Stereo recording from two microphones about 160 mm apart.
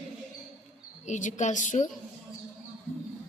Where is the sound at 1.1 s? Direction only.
50° left (ahead or behind).